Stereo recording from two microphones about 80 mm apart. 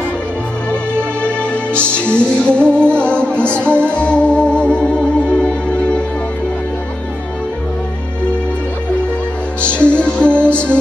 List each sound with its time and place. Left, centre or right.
1.5 s music: centre
9.6 s music: centre